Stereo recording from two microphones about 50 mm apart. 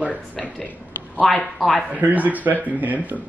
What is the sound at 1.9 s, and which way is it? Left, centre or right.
Speech, right.